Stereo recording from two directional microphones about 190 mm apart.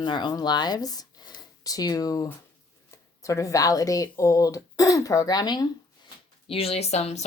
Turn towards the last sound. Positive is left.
turn(degrees=35)  # may be behind; listen again after turning